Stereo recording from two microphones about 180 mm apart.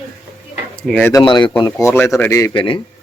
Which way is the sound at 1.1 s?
25° left (ahead or behind).